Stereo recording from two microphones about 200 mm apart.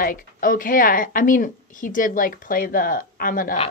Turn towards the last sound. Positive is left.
turn(degrees=45)  # may be behind; listen again after turning